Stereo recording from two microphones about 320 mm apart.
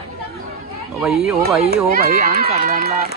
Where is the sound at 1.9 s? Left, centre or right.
Right.